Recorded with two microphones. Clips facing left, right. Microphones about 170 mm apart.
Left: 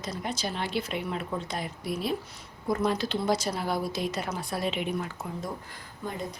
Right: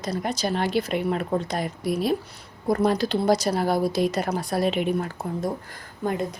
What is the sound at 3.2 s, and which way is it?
Speech, 40° right (ahead or behind).